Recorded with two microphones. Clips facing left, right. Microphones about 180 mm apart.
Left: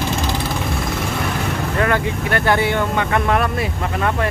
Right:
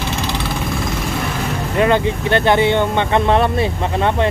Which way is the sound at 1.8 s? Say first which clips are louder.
Right 5 dB; 25° right (ahead or behind).